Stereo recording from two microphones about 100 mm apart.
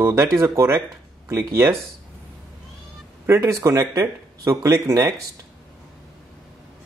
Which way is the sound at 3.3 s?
30° right (ahead or behind).